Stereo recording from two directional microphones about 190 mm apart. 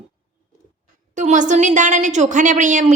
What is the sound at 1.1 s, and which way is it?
A woman's voice, 40° right (ahead or behind).